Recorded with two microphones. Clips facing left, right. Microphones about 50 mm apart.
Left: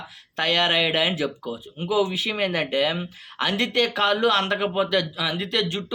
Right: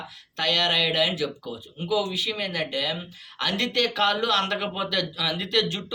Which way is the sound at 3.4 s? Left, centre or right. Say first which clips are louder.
Left 3 dB; centre.